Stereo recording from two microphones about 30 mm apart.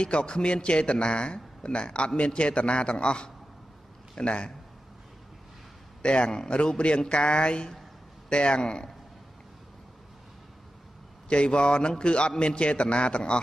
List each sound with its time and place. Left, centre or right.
0.0 s a man's voice: left
6.0 s a man's voice: left
11.2 s a man's voice: left